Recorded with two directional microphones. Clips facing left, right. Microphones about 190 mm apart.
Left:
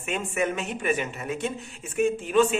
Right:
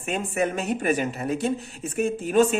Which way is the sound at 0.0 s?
35° right (ahead or behind).